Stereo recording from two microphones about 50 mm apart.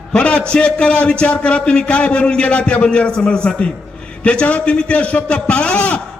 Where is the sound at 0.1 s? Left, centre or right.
Left.